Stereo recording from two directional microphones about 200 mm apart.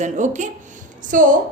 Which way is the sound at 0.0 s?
35° right (ahead or behind).